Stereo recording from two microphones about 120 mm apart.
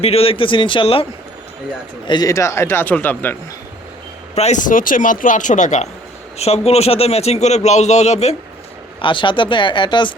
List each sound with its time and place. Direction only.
0.0 s speech: 55° left (ahead or behind)
2.0 s a man's voice: 35° left (ahead or behind); by 3.3 s 15° left (ahead or behind)
4.4 s speech: 80° left
6.7 s speech: 60° left (ahead or behind)
9.0 s speech: 45° left (ahead or behind)